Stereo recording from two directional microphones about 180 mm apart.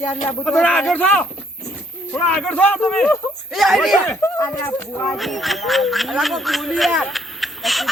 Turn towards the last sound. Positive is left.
turn(degrees=0)  # may be behind; listen again after turning